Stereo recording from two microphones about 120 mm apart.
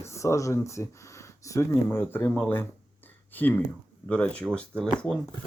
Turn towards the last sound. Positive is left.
turn(degrees=5)  # may be behind; listen again after turning